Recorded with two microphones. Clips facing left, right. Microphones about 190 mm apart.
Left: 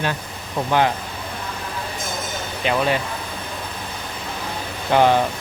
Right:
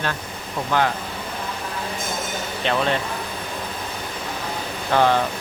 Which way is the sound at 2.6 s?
10° left (ahead or behind).